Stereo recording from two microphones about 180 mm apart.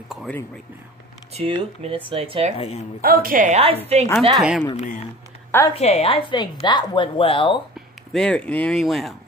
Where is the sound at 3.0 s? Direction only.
55° right (ahead or behind).